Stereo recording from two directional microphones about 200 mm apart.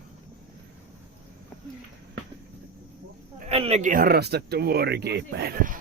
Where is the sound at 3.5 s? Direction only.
30° right (ahead or behind).